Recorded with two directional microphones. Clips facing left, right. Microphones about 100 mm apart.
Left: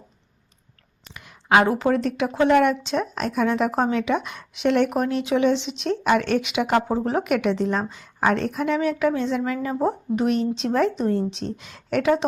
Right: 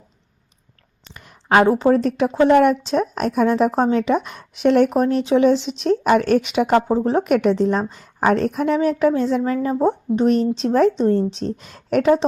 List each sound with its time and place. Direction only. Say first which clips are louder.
1.0 s a woman's voice: right 1 dB; 40° right (ahead or behind)
6.8 s a woman's voice: right 5 dB; 30° right (ahead or behind)